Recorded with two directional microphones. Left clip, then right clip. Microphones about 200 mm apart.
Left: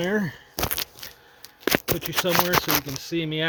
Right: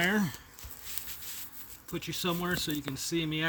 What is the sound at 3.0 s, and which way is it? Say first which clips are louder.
Speech: left 5 dB; 30° right (ahead or behind).